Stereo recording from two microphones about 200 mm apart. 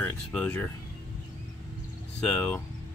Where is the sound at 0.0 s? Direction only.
5° left (ahead or behind).